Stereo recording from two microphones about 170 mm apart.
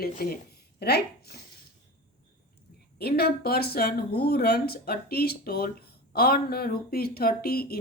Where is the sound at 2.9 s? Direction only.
65° left (ahead or behind).